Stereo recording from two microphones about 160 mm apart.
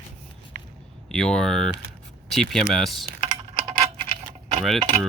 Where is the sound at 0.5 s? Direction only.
75° right (ahead or behind).